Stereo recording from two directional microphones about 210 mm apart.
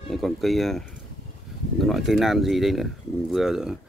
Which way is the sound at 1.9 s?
Centre (ahead or behind).